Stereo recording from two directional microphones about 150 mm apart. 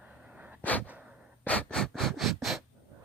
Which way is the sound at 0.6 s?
10° left (ahead or behind).